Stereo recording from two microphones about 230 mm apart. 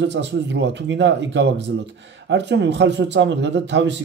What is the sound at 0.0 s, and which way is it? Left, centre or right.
A man's voice, right.